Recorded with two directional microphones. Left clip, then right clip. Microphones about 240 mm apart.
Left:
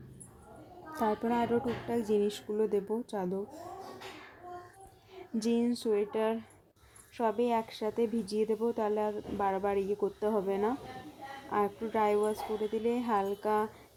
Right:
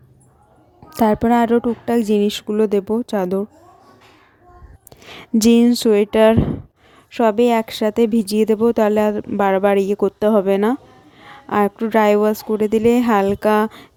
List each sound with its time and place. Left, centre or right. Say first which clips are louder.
0.9 s speech: right 15 dB; right
5.0 s speech: right 18 dB; right